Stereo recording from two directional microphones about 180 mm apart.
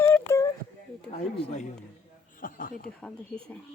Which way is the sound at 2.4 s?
50° left (ahead or behind).